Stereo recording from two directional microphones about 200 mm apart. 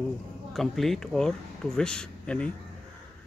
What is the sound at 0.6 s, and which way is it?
Speech, centre (ahead or behind).